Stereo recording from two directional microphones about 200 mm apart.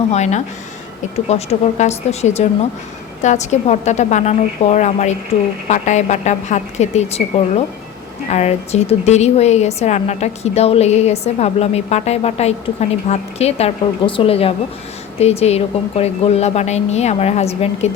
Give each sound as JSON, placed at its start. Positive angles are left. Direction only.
{"t": 0.1, "sound": "a woman's voice", "side_deg": 35}